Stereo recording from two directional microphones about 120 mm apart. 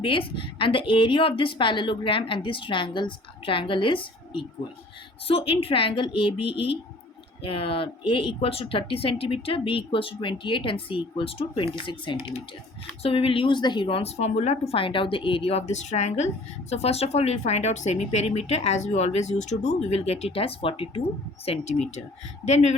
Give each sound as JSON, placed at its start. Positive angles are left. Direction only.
{"t": 0.0, "sound": "a woman's voice", "side_deg": 45}
{"t": 21.4, "sound": "speech", "side_deg": 60}